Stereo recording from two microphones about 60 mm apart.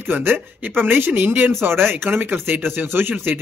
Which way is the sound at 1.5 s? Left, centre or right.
Right.